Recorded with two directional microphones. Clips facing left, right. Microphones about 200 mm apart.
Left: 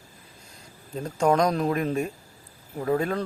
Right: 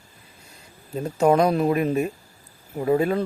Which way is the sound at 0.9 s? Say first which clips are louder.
Right 4 dB; 5° right (ahead or behind).